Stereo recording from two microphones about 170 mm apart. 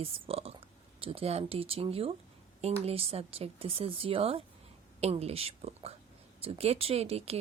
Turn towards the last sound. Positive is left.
turn(degrees=-35)  # may be behind; listen again after turning